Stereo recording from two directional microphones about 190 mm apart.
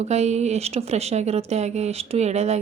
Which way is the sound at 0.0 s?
35° right (ahead or behind).